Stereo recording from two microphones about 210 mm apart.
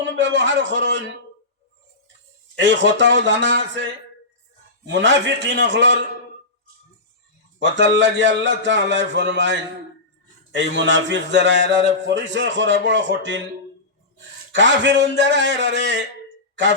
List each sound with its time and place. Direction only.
0.0 s a man's voice: 60° right (ahead or behind)
2.6 s a man's voice: 60° right (ahead or behind)
4.9 s a man's voice: 60° right (ahead or behind)
7.6 s a man's voice: 60° right (ahead or behind)
14.5 s a man's voice: 60° right (ahead or behind)